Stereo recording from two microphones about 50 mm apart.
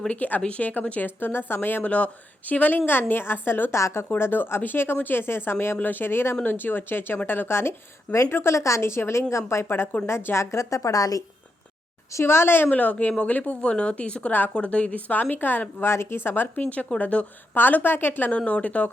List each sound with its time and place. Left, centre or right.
0.1 s a woman's voice: left
1.8 s speech: left
3.8 s speech: left
4.2 s a woman's voice: left
12.1 s a woman's voice: left
12.7 s a woman's voice: left
15.8 s speech: left
17.0 s speech: left
17.5 s a woman's voice: left
18.3 s speech: left